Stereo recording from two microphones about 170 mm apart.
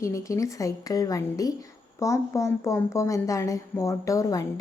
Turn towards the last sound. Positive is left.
turn(degrees=20)  # may be behind; listen again after turning